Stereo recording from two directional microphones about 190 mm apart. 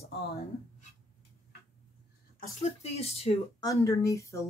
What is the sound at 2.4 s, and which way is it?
Speech, 35° left (ahead or behind).